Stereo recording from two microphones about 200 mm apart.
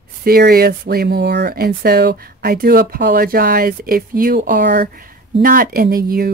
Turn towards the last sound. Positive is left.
turn(degrees=-45)  # may be behind; listen again after turning